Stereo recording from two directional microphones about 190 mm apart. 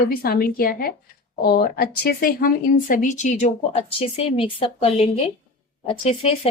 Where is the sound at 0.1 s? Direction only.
50° left (ahead or behind).